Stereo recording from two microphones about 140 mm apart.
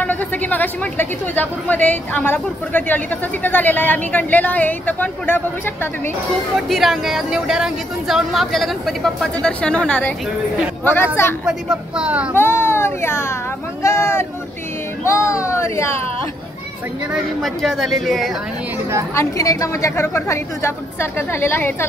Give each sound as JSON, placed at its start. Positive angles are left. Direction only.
{"t": 0.0, "sound": "a woman's voice", "side_deg": 10}
{"t": 6.7, "sound": "a woman's voice", "side_deg": 0}
{"t": 11.4, "sound": "a woman's voice", "side_deg": -5}
{"t": 12.4, "sound": "a woman's voice", "side_deg": 15}
{"t": 17.1, "sound": "a woman's voice", "side_deg": 0}
{"t": 19.1, "sound": "a woman's voice", "side_deg": 20}